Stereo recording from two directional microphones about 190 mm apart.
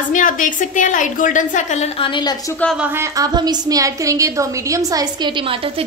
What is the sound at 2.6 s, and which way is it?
A woman's voice, 5° right (ahead or behind).